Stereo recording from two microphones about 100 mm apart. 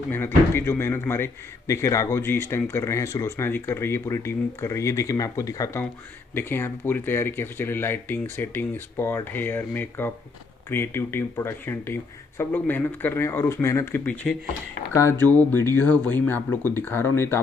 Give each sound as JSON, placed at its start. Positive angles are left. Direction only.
{"t": 0.1, "sound": "speech", "side_deg": 25}
{"t": 14.0, "sound": "speech", "side_deg": 15}